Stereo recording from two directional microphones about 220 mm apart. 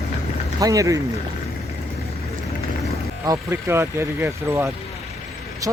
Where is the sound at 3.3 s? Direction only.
10° right (ahead or behind).